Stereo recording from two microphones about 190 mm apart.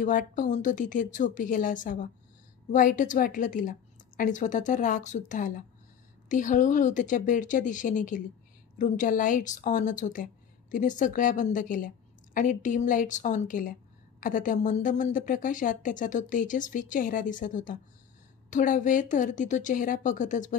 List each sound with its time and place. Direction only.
0.0 s a woman's voice: 45° left (ahead or behind)